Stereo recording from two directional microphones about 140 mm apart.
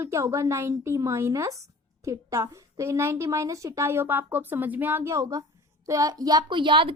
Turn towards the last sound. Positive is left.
turn(degrees=-35)  # may be behind; listen again after turning